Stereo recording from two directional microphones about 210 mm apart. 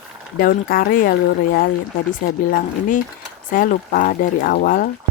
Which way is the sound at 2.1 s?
40° left (ahead or behind).